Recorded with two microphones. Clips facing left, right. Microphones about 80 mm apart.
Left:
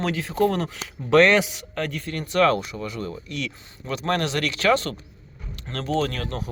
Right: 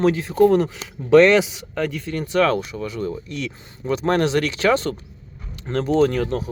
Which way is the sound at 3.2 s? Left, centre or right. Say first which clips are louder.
Right 2 dB; right.